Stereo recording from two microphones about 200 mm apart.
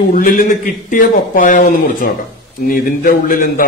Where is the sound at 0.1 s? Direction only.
45° left (ahead or behind).